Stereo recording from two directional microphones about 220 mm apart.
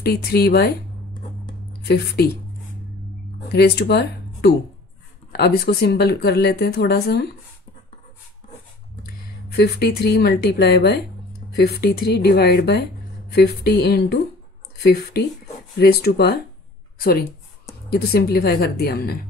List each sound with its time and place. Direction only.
0.0 s speech: 45° left (ahead or behind)
2.2 s speech: 45° left (ahead or behind)
3.5 s speech: 45° left (ahead or behind)
9.6 s speech: 45° left (ahead or behind)
17.8 s speech: 45° left (ahead or behind)